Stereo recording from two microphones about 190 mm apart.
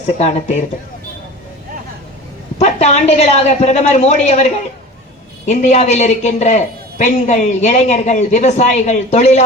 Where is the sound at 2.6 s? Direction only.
35° left (ahead or behind).